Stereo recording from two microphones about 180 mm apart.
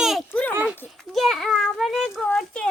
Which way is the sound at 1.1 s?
Centre (ahead or behind).